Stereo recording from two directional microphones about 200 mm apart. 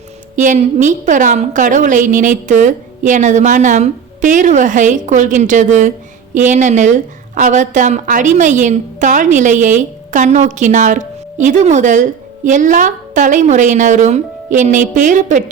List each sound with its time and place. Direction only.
0.3 s a woman's voice: 35° right (ahead or behind)